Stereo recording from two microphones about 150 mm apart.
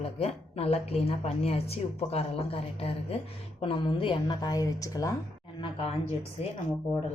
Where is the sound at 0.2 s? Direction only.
40° left (ahead or behind); by 5.1 s 25° left (ahead or behind).